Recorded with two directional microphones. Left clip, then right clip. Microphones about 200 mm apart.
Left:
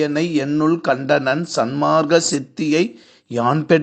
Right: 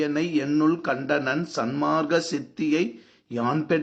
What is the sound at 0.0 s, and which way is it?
Speech, 30° left (ahead or behind).